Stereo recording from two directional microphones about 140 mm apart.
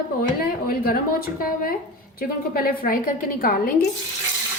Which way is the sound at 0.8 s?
90° left.